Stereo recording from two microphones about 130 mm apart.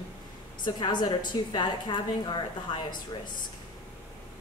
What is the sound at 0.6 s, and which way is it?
A woman's voice, 35° left (ahead or behind).